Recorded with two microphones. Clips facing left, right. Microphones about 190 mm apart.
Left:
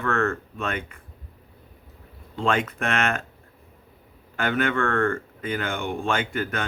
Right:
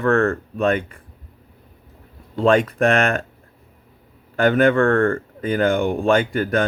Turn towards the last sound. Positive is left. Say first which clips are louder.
# right 8 dB
turn(degrees=-35)  # may be behind; listen again after turning